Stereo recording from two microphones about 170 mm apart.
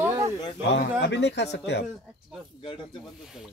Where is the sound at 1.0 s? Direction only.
90° left.